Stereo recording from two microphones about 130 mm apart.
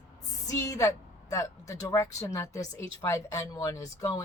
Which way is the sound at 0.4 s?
25° left (ahead or behind).